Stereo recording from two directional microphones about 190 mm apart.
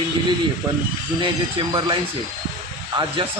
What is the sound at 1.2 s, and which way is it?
Speech, 25° right (ahead or behind).